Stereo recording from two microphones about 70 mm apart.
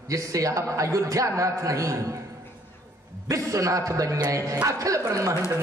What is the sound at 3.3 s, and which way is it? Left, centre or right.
A man's voice, right.